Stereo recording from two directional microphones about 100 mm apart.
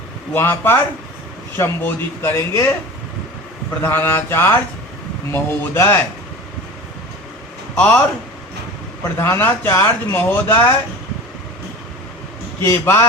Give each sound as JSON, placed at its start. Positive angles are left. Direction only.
{"t": 0.3, "sound": "speech", "side_deg": 25}
{"t": 3.8, "sound": "speech", "side_deg": 20}
{"t": 7.8, "sound": "speech", "side_deg": 15}
{"t": 9.1, "sound": "speech", "side_deg": 25}
{"t": 12.6, "sound": "speech", "side_deg": 30}